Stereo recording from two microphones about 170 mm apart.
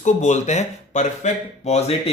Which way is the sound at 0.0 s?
45° left (ahead or behind).